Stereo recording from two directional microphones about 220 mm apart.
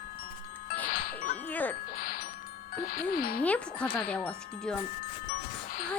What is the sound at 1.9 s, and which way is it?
Music, 40° left (ahead or behind).